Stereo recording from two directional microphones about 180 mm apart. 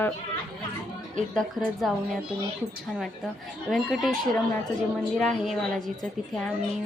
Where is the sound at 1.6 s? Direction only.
5° right (ahead or behind).